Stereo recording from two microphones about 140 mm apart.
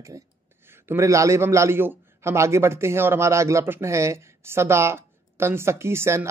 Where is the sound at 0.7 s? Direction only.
20° right (ahead or behind).